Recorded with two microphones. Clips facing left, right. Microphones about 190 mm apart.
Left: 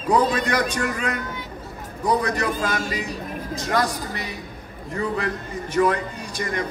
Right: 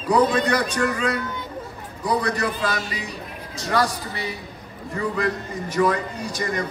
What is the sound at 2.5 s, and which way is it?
Speech, 45° left (ahead or behind).